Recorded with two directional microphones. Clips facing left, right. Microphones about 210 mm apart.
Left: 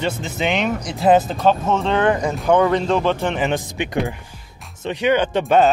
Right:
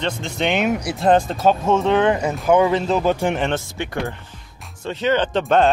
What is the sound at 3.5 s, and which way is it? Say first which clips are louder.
Speech: left 2 dB; 15° left (ahead or behind).